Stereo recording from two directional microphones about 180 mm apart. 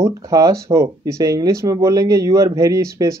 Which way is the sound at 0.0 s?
20° right (ahead or behind).